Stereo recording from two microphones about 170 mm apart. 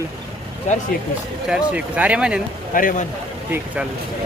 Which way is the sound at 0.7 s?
45° left (ahead or behind).